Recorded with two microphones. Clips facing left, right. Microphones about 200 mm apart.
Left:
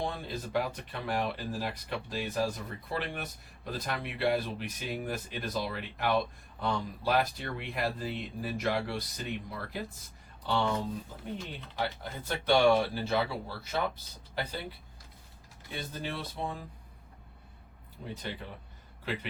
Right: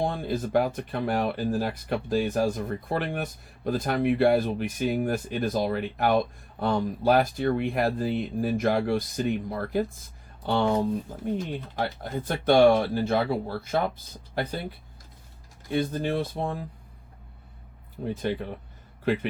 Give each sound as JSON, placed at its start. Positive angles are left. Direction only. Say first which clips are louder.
{"t": 0.0, "sound": "speech", "louder": "right 8 dB", "side_deg": -50}
{"t": 15.7, "sound": "speech", "louder": "right 12 dB", "side_deg": -50}
{"t": 18.0, "sound": "a man's voice", "louder": "right 11 dB", "side_deg": -50}